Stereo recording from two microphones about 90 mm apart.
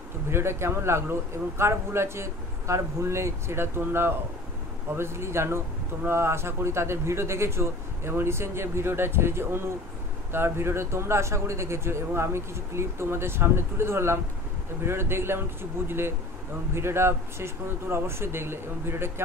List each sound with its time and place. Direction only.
0.3 s speech: 30° right (ahead or behind)
16.7 s speech: 30° right (ahead or behind)